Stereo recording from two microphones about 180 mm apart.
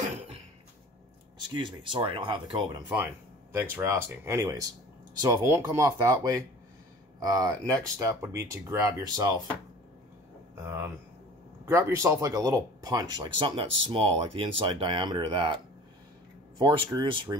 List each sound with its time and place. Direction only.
1.5 s speech: 25° right (ahead or behind)
3.5 s speech: 10° right (ahead or behind)
10.5 s a sound: 15° right (ahead or behind)
11.6 s speech: 15° right (ahead or behind)